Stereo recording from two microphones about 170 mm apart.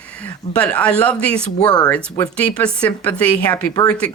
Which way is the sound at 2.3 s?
5° left (ahead or behind).